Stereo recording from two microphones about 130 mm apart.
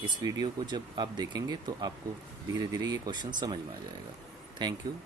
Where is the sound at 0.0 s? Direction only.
30° right (ahead or behind).